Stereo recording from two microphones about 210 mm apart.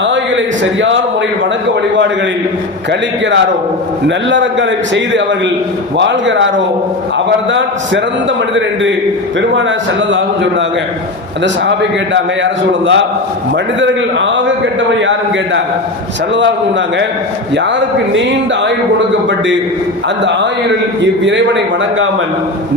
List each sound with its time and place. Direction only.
0.0 s a sound: 60° right (ahead or behind)
4.3 s a man's voice: 60° right (ahead or behind)
9.6 s a man's voice: 65° right (ahead or behind)
12.1 s a man's voice: 60° right (ahead or behind)
18.1 s speech: 60° right (ahead or behind)
21.0 s a man's voice: 60° right (ahead or behind)